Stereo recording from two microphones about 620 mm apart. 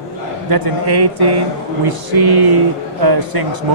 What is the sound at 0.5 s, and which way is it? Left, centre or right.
A man's voice, right.